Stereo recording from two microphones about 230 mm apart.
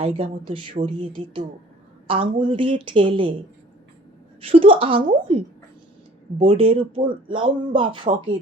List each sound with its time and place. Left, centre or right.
0.0 s speech: right
4.4 s speech: right
6.4 s speech: right